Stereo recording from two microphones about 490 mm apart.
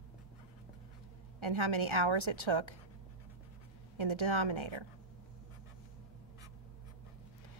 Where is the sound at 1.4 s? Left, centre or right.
Right.